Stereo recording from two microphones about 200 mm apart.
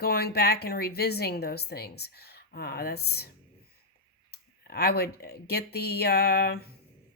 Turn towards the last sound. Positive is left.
turn(degrees=50)  # may be behind; listen again after turning